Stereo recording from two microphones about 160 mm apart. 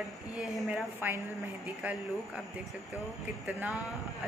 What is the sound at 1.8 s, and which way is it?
A woman's voice, 5° right (ahead or behind).